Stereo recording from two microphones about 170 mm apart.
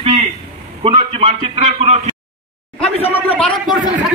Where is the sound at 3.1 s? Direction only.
10° left (ahead or behind).